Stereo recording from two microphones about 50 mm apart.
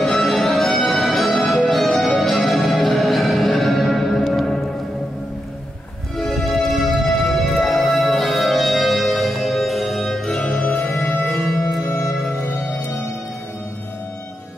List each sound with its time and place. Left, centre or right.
0.0 s music: centre
6.1 s music: centre
10.4 s music: left
11.2 s music: centre